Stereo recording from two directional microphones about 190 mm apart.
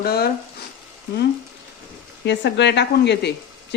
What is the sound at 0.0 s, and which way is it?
Speech, 55° left (ahead or behind).